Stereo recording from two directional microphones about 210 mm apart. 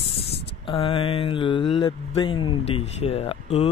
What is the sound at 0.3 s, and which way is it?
Speech, 25° left (ahead or behind).